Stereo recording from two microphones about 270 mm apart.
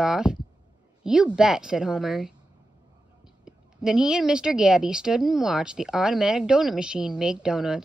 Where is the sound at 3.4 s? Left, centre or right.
Centre.